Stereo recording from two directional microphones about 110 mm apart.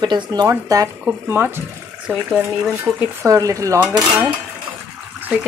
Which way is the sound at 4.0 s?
20° right (ahead or behind).